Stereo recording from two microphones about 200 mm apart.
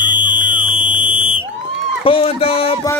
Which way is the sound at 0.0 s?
20° left (ahead or behind).